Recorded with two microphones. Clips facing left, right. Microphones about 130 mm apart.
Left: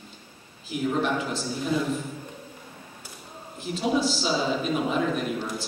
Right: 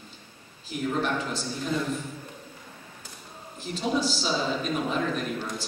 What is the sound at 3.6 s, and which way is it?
A man's voice, 5° left (ahead or behind).